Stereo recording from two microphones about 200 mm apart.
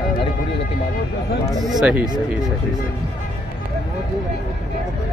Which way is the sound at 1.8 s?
5° right (ahead or behind).